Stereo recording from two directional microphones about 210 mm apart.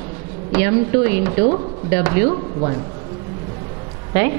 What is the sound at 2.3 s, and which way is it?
Speech, 30° right (ahead or behind).